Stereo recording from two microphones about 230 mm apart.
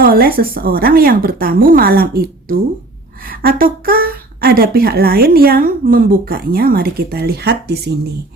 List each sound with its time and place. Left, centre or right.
0.0 s speech: right